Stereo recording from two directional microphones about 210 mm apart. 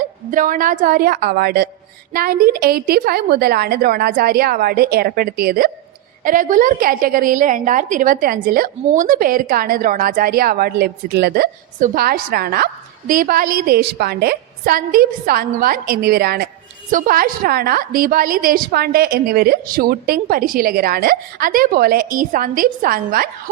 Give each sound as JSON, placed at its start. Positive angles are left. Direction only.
{"t": 0.3, "sound": "a woman's voice", "side_deg": -40}